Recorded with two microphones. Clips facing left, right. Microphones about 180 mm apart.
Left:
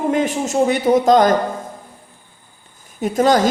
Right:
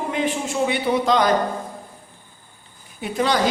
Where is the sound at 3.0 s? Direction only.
45° left (ahead or behind).